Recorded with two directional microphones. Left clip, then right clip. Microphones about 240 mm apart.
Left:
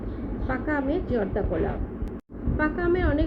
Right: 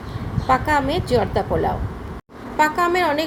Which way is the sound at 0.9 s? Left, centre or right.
Centre.